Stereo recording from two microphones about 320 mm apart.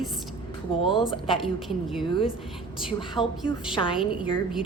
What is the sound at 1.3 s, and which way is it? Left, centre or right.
Speech, centre.